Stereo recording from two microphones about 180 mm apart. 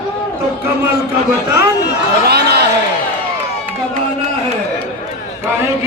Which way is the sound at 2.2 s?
65° right (ahead or behind).